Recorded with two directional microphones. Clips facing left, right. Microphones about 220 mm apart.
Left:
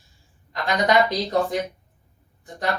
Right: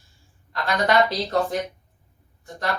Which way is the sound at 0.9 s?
15° left (ahead or behind).